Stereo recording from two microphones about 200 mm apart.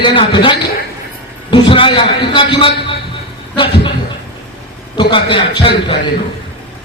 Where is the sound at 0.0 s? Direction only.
25° left (ahead or behind).